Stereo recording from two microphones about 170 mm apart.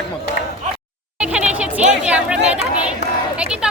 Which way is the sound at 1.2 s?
5° right (ahead or behind).